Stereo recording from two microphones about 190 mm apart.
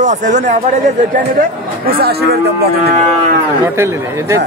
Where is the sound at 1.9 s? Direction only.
55° right (ahead or behind).